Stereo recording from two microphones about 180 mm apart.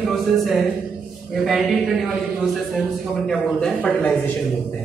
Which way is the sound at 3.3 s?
5° left (ahead or behind).